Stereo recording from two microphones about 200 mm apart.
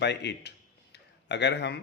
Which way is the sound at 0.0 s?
60° left (ahead or behind).